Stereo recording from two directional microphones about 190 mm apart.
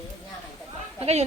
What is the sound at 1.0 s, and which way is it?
Speech, 35° right (ahead or behind).